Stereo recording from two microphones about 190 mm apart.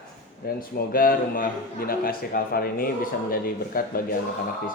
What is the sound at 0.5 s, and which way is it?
A man's voice, 50° left (ahead or behind).